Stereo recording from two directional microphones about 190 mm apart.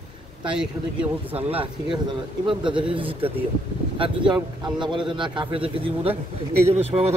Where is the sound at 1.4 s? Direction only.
30° right (ahead or behind).